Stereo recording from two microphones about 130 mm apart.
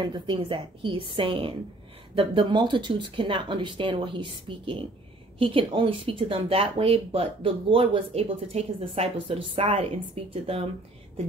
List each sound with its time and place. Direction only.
0.0 s speech: 40° right (ahead or behind)